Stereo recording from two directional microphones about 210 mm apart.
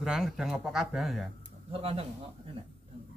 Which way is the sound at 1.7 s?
25° right (ahead or behind).